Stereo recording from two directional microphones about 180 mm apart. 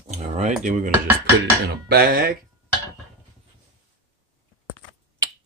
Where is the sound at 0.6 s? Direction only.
45° right (ahead or behind).